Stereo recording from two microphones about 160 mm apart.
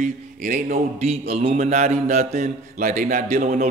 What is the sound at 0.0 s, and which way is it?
Speech, 55° right (ahead or behind).